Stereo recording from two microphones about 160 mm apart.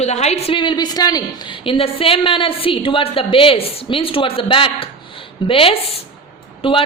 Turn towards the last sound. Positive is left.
turn(degrees=35)  # may be behind; listen again after turning